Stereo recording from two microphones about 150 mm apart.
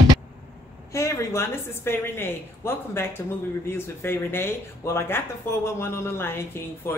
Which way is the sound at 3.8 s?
15° left (ahead or behind).